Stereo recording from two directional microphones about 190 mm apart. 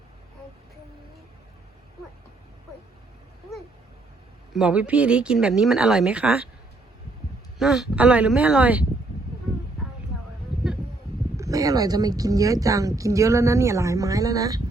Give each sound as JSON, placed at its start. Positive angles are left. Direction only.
{"t": 4.5, "sound": "speech", "side_deg": -5}
{"t": 7.6, "sound": "speech", "side_deg": 0}
{"t": 11.3, "sound": "speech", "side_deg": -15}